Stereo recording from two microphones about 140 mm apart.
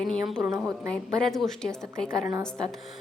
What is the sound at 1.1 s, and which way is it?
Speech, 5° left (ahead or behind).